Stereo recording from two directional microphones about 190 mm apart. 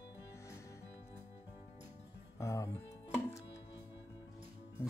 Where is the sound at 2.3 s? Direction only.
15° left (ahead or behind).